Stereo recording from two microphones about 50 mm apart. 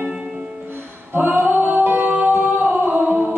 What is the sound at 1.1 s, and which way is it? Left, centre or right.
Music, right.